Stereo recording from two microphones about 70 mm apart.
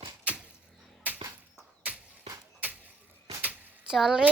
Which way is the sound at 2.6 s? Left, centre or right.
Right.